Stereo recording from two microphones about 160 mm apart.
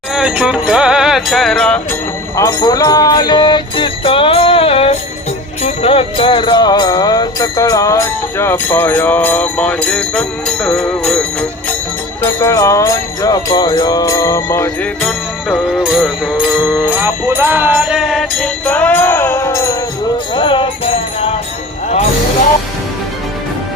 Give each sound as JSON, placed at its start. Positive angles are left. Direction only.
{"t": 0.1, "sound": "music", "side_deg": -5}
{"t": 2.3, "sound": "music", "side_deg": 20}
{"t": 12.2, "sound": "jingle bell", "side_deg": 20}
{"t": 15.0, "sound": "music", "side_deg": 0}
{"t": 20.3, "sound": "music", "side_deg": 30}